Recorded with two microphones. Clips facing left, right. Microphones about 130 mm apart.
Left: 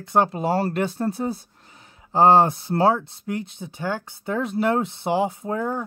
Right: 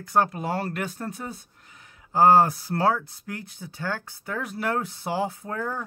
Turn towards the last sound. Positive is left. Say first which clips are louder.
# left 5 dB
turn(degrees=20)  # may be behind; listen again after turning